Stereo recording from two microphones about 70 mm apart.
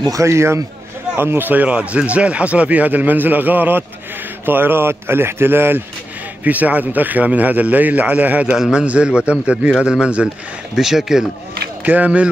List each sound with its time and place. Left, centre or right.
0.1 s a man's voice: right
1.1 s speech: right
6.4 s speech: right
8.5 s a man's voice: centre
11.8 s speech: right